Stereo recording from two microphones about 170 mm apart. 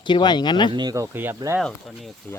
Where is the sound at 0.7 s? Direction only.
25° right (ahead or behind).